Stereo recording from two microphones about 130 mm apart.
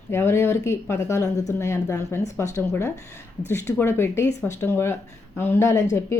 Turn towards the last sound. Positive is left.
turn(degrees=20)  # may be behind; listen again after turning